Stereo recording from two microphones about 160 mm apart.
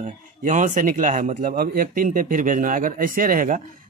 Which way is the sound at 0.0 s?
50° right (ahead or behind).